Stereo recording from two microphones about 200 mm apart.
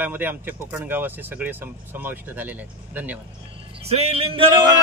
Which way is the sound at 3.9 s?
30° right (ahead or behind).